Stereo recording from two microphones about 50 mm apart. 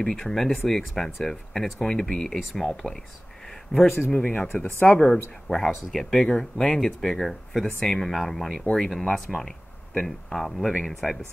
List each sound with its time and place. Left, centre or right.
0.0 s speech: centre
3.7 s speech: left
4.6 s speech: left
5.9 s speech: centre